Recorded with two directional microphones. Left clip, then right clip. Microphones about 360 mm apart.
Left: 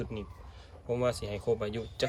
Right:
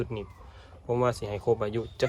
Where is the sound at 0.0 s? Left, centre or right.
Centre.